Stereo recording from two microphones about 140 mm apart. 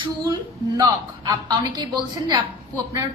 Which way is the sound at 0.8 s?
25° right (ahead or behind).